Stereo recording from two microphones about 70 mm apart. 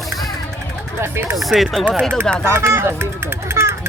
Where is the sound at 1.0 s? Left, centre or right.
Right.